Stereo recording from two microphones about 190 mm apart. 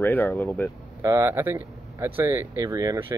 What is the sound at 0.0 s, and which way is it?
Speech, 10° left (ahead or behind).